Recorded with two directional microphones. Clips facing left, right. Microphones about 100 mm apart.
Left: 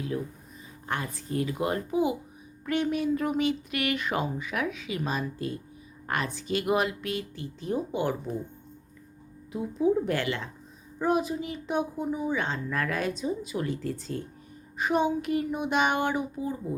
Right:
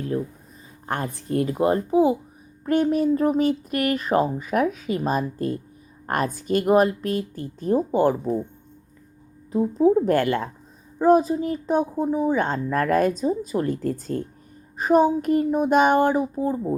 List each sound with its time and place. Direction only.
0.1 s a woman's voice: 40° right (ahead or behind)
9.5 s a woman's voice: 35° right (ahead or behind)
11.0 s a woman's voice: 35° right (ahead or behind)